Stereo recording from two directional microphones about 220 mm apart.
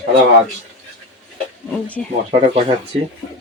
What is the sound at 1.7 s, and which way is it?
Speech, 5° left (ahead or behind).